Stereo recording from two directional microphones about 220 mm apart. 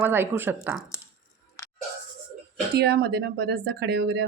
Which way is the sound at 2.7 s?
45° right (ahead or behind).